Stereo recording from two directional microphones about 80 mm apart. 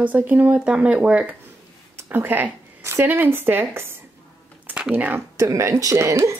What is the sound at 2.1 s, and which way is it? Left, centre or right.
Speech, right.